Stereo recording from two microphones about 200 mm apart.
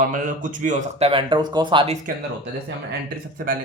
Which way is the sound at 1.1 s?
25° right (ahead or behind).